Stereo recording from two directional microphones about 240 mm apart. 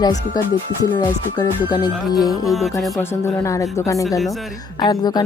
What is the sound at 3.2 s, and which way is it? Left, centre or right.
Speech, centre.